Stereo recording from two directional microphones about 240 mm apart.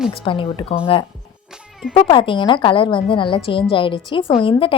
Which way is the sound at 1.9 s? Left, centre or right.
Left.